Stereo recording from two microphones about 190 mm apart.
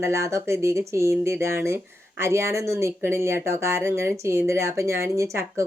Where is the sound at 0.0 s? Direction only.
15° right (ahead or behind).